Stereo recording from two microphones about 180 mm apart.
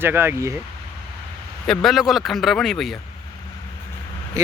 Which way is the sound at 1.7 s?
Centre (ahead or behind).